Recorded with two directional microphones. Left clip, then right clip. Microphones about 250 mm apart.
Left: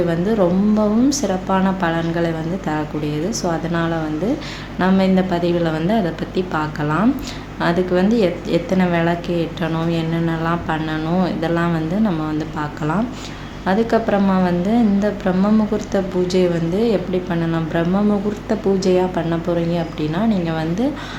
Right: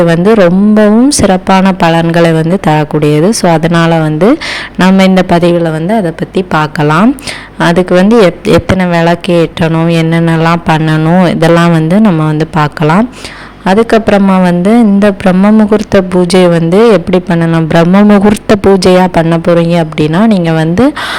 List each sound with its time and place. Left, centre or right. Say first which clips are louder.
1.1 s a woman's voice: right 12 dB; right